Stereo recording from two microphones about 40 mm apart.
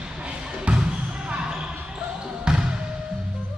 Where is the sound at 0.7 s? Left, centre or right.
Right.